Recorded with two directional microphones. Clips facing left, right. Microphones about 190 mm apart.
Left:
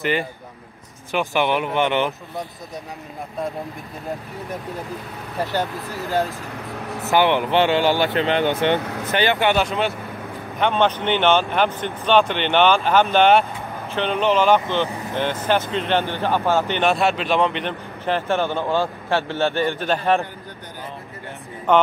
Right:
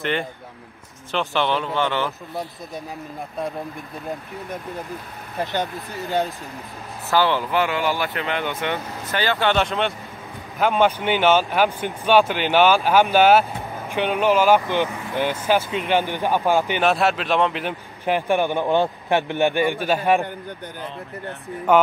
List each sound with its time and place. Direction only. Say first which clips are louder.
0.0 s speech: left 2 dB; 5° left (ahead or behind)
5.4 s speech: left 1 dB; 20° right (ahead or behind)
5.9 s speech: left 1 dB; centre (ahead or behind)
7.1 s speech: left 2 dB; 20° left (ahead or behind)
9.1 s speech: left 2 dB; 20° left (ahead or behind)
9.6 s speech: left 1 dB; centre (ahead or behind)
10.6 s speech: right 1 dB; 10° right (ahead or behind)
21.7 s speech: even; 10° right (ahead or behind)